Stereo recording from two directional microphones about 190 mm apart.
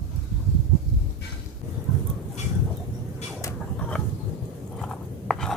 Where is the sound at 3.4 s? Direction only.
5° left (ahead or behind).